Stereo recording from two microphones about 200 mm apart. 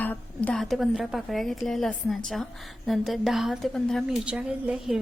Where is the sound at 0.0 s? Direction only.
10° left (ahead or behind).